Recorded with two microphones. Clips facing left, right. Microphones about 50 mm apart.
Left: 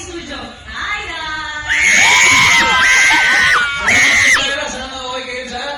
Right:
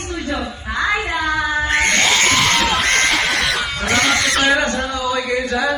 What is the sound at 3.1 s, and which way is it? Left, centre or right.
Screaming, left.